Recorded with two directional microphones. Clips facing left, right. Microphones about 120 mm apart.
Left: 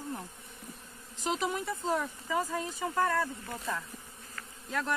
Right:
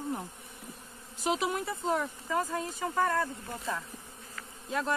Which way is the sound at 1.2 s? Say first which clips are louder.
Right 2 dB; 5° right (ahead or behind).